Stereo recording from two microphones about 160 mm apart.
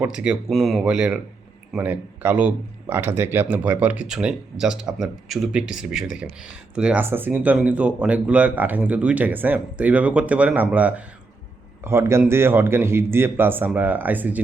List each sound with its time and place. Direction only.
0.0 s a man's voice: 5° right (ahead or behind)